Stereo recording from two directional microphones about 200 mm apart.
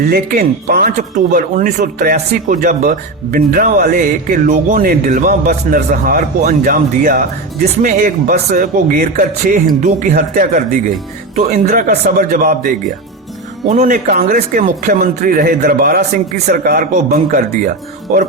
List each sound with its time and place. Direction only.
0.1 s speech: 45° right (ahead or behind)